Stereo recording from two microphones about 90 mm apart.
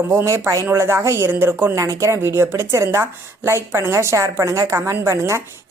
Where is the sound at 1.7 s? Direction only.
35° right (ahead or behind).